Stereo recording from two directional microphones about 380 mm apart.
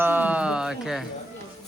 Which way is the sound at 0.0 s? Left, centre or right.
Centre.